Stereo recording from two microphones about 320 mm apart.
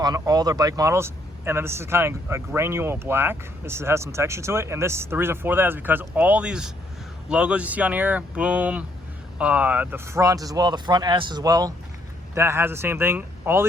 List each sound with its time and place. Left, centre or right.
0.0 s a man's voice: centre